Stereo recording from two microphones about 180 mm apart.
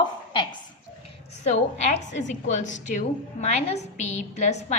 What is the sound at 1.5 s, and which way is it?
A woman's voice, 40° left (ahead or behind).